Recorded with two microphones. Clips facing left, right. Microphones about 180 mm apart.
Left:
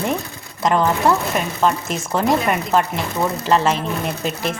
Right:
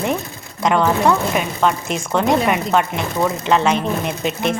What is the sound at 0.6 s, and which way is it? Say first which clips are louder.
Speech: right 1 dB; centre (ahead or behind).